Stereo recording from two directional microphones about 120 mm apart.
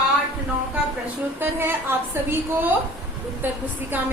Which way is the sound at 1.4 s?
20° right (ahead or behind).